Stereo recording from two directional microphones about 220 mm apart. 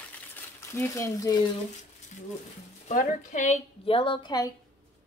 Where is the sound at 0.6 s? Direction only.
10° left (ahead or behind).